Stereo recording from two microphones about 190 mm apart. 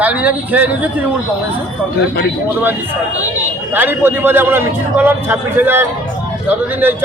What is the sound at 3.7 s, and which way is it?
A man's voice, 10° right (ahead or behind).